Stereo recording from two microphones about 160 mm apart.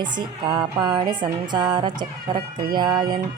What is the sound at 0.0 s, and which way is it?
Mantra, 30° right (ahead or behind).